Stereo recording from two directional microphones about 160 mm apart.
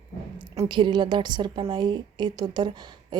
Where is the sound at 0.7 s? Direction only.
30° right (ahead or behind).